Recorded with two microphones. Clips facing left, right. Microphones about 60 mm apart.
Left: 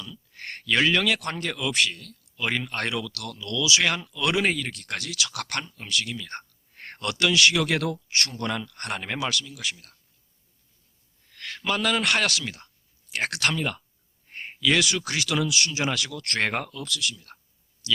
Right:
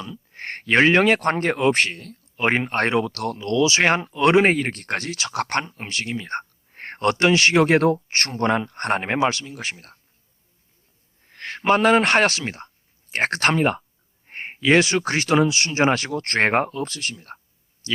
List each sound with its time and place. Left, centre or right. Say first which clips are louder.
0.0 s speech: right 6 dB; right
11.2 s speech: right 6 dB; right